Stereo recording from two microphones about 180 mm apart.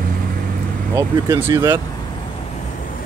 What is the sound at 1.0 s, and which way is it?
Speech, 15° right (ahead or behind).